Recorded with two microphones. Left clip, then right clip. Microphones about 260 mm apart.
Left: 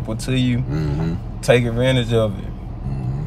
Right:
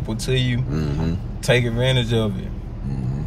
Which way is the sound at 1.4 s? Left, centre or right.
Centre.